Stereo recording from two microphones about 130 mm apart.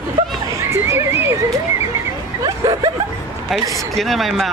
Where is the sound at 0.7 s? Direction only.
20° right (ahead or behind).